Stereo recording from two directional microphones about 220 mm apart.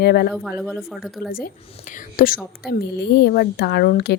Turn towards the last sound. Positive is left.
turn(degrees=45)  # may be behind; listen again after turning